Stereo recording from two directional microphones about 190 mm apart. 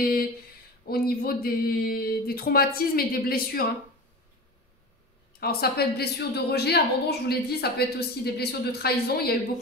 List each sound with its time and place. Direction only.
0.0 s speech: 55° left (ahead or behind)
5.4 s a woman's voice: 55° left (ahead or behind)